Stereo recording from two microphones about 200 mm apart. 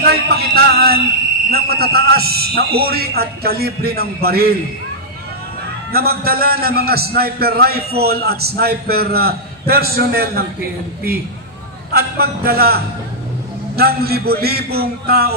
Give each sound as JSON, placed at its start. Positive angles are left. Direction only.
{"t": 0.0, "sound": "a man's voice", "side_deg": -50}
{"t": 5.9, "sound": "a man's voice", "side_deg": -50}
{"t": 11.9, "sound": "a man's voice", "side_deg": -50}